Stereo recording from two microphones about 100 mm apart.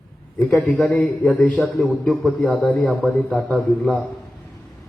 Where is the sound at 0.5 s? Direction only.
5° left (ahead or behind).